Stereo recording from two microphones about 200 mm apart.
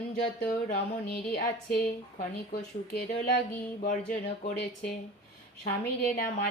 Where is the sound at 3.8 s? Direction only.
40° left (ahead or behind).